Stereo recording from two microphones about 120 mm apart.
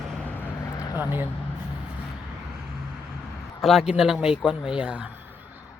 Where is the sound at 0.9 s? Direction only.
15° right (ahead or behind).